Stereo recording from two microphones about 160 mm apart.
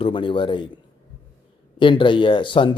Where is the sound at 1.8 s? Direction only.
30° left (ahead or behind).